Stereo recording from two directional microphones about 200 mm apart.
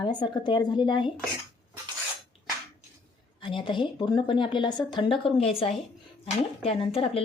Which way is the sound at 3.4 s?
25° left (ahead or behind).